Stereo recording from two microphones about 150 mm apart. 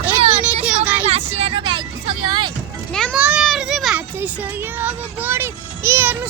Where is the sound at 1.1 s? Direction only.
45° right (ahead or behind).